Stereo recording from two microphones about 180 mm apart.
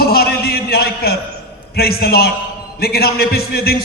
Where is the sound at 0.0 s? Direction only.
60° left (ahead or behind).